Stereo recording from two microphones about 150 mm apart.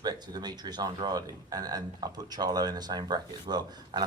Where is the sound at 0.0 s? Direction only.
25° right (ahead or behind).